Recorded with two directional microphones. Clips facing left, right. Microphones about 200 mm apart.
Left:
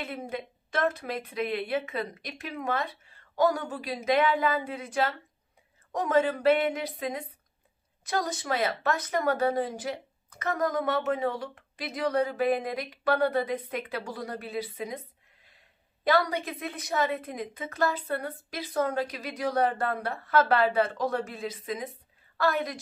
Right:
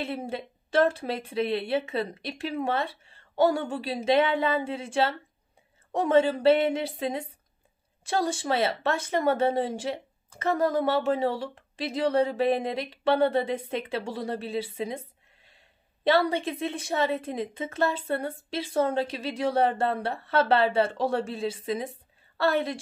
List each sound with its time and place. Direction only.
0.0 s speech: 30° right (ahead or behind)